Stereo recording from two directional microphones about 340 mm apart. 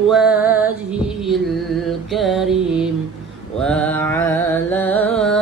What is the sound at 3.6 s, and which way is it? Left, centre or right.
Music, centre.